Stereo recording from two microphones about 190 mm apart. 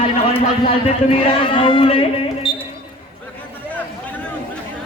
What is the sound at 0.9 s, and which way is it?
A man's voice, 30° left (ahead or behind).